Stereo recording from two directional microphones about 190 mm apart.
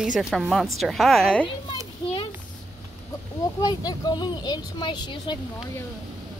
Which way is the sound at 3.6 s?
20° left (ahead or behind).